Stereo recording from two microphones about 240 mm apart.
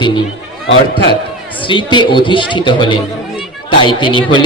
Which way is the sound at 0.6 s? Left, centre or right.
Left.